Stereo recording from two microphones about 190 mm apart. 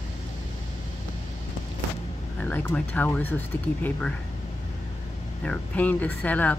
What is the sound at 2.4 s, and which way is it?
Speech, 10° left (ahead or behind).